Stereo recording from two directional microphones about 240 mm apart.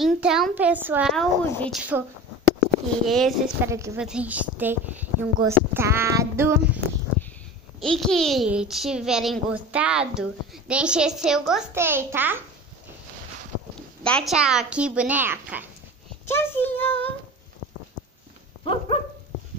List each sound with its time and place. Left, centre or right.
0.0 s a child's voice: centre
3.1 s a woman's voice: centre
7.8 s a child's voice: centre
14.0 s a child's voice: centre
16.3 s a child's voice: centre
18.6 s dog: left